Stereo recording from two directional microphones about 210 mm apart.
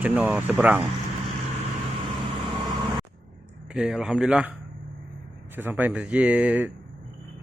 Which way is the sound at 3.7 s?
5° right (ahead or behind).